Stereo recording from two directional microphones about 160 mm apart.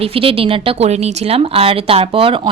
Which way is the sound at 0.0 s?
35° right (ahead or behind).